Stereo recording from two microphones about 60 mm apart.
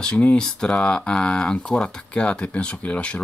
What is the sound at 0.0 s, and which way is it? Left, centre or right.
Speech, centre.